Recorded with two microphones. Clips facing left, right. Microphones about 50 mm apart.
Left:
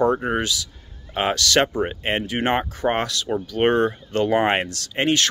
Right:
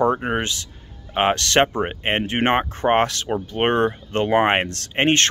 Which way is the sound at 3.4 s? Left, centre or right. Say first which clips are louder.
Left 1 dB; right.